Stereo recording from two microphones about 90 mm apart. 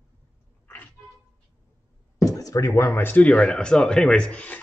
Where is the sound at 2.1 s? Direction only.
40° left (ahead or behind).